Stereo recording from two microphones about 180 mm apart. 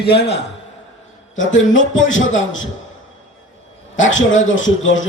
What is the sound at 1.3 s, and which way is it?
A man's voice, 90° left.